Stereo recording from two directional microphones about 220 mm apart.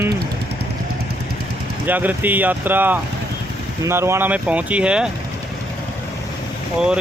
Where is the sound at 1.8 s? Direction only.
10° right (ahead or behind).